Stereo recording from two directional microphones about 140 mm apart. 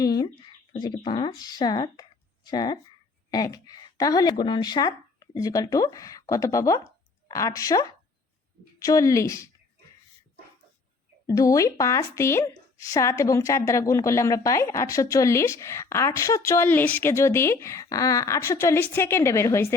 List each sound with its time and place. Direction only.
0.0 s a sound: 30° left (ahead or behind)
0.7 s a woman's voice: 35° left (ahead or behind)
11.3 s a woman's voice: 25° left (ahead or behind)